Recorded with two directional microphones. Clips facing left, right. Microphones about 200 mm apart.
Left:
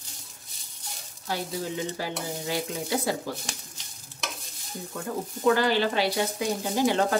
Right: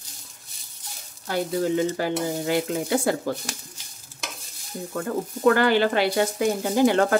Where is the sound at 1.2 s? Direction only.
60° right (ahead or behind).